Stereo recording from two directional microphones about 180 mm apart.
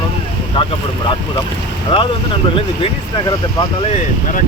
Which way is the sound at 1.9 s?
30° left (ahead or behind).